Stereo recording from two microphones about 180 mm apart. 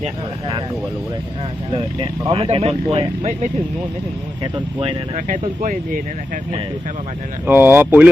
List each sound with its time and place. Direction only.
0.0 s speech: 30° right (ahead or behind)
1.7 s speech: 30° right (ahead or behind)
4.5 s speech: 30° right (ahead or behind)
5.1 s speech: 45° right (ahead or behind)
7.4 s speech: 10° right (ahead or behind)